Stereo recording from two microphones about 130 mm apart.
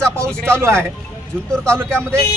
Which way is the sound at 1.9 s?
5° left (ahead or behind).